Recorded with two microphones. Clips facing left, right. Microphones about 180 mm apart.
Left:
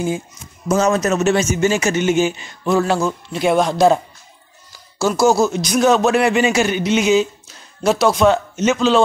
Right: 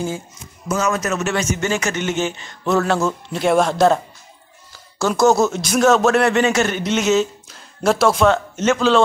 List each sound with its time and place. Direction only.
0.7 s a man's voice: 35° left (ahead or behind)
1.3 s a man's voice: 15° left (ahead or behind); by 3.8 s centre (ahead or behind)
4.9 s a man's voice: 5° left (ahead or behind)